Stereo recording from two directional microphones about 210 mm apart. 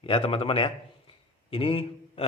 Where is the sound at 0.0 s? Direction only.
25° left (ahead or behind).